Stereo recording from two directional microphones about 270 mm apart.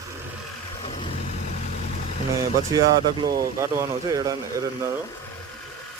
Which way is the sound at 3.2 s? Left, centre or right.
Centre.